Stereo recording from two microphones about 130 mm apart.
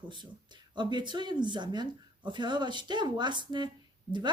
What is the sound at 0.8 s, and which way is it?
Speech, 35° right (ahead or behind).